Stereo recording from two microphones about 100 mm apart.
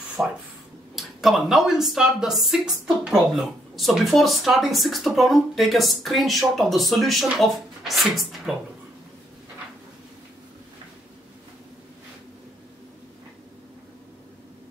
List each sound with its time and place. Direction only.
0.2 s speech: 15° right (ahead or behind)
0.9 s speech: centre (ahead or behind)